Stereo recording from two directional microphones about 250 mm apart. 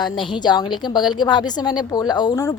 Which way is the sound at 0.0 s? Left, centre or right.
Centre.